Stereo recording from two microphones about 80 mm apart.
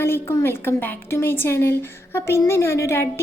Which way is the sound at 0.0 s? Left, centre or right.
Left.